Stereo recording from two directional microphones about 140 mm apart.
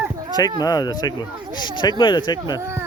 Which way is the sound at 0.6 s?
25° left (ahead or behind).